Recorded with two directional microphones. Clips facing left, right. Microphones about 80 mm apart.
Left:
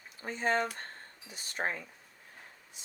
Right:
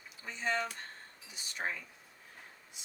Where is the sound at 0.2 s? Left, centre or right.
Left.